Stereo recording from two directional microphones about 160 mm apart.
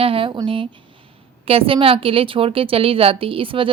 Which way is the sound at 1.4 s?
35° right (ahead or behind).